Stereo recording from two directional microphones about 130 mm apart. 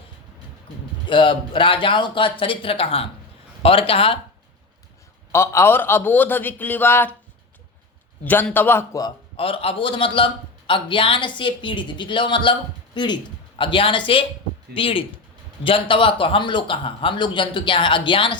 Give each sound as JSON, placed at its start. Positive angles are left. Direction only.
{"t": 1.0, "sound": "a man's voice", "side_deg": 40}
{"t": 5.3, "sound": "a man's voice", "side_deg": 20}
{"t": 8.2, "sound": "a man's voice", "side_deg": 15}
{"t": 9.3, "sound": "a man's voice", "side_deg": 45}